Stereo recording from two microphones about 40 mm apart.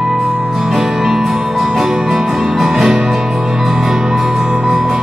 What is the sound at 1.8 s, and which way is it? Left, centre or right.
Music, centre.